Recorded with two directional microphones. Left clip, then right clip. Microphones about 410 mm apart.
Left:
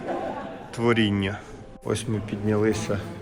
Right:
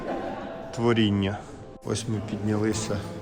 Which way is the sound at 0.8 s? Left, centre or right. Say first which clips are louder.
Left 1 dB; centre.